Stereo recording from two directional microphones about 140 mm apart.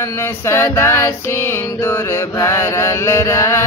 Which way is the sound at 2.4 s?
20° left (ahead or behind).